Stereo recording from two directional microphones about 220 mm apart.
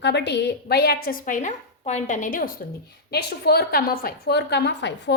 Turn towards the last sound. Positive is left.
turn(degrees=50)  # may be behind; listen again after turning